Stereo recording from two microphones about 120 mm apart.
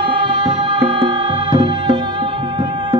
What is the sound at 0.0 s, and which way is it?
Music, 45° right (ahead or behind).